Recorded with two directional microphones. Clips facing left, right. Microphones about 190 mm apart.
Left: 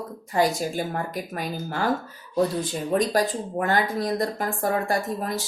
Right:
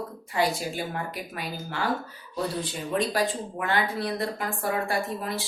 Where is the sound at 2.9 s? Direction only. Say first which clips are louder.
Left 3 dB; 45° left (ahead or behind).